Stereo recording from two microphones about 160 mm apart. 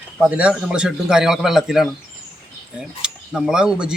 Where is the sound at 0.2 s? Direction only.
10° right (ahead or behind).